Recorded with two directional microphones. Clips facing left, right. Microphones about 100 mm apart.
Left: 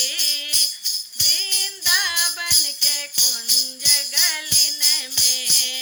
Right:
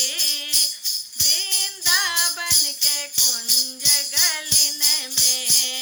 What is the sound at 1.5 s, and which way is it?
Music, 20° right (ahead or behind).